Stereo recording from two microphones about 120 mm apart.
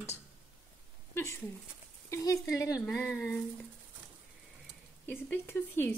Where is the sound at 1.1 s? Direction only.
20° left (ahead or behind).